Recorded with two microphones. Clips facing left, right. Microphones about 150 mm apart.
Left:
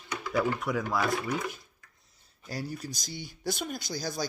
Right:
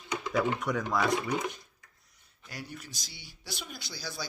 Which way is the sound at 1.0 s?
20° right (ahead or behind).